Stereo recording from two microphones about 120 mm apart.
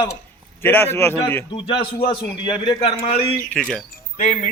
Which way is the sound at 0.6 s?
20° left (ahead or behind).